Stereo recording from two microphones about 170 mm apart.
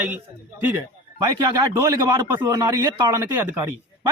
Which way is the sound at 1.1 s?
25° right (ahead or behind).